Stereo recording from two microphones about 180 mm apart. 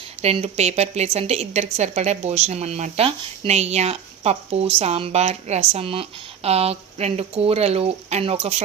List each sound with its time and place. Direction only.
0.2 s a woman's voice: 35° right (ahead or behind)